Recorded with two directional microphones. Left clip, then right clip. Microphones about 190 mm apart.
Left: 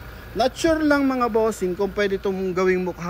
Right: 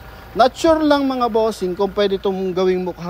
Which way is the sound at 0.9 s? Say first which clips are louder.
Right 3 dB; 15° right (ahead or behind).